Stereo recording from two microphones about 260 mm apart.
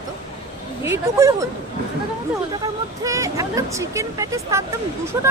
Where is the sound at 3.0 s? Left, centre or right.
Centre.